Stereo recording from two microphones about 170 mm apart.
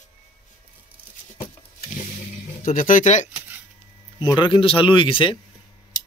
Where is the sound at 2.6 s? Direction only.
50° left (ahead or behind).